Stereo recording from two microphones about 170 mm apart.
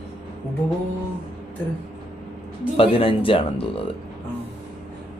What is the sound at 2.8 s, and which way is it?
Speech, 30° left (ahead or behind).